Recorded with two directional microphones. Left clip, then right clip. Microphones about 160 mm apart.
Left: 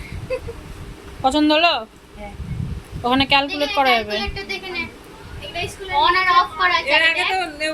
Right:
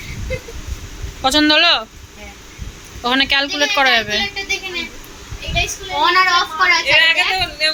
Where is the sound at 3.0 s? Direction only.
5° left (ahead or behind).